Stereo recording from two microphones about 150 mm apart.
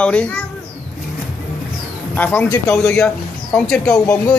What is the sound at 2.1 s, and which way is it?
A man's voice, 10° left (ahead or behind).